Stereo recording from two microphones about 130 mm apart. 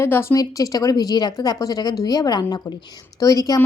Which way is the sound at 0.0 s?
20° left (ahead or behind).